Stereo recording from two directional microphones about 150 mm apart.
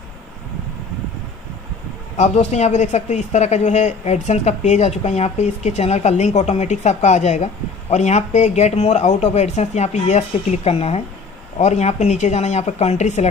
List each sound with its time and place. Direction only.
2.1 s speech: 50° left (ahead or behind)